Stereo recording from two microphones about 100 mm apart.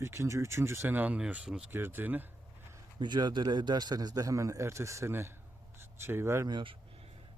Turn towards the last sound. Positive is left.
turn(degrees=-50)  # may be behind; listen again after turning